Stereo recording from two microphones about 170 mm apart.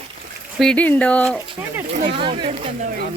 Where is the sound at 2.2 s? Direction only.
30° right (ahead or behind).